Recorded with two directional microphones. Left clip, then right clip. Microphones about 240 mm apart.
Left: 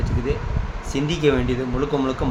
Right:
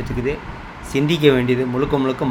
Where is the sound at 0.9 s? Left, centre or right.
Centre.